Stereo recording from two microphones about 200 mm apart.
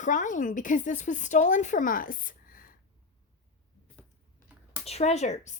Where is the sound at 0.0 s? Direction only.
40° left (ahead or behind).